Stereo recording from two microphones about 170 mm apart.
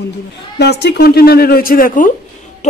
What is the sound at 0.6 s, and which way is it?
A woman's voice, 80° left.